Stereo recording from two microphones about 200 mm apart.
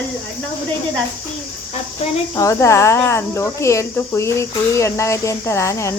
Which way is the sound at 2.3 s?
15° left (ahead or behind).